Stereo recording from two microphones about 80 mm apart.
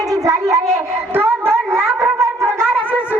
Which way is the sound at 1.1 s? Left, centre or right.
Right.